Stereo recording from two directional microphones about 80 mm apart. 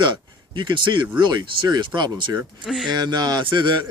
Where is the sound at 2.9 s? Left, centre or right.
Right.